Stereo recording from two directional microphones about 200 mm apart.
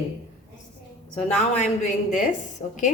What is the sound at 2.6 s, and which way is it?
Speech, 35° left (ahead or behind).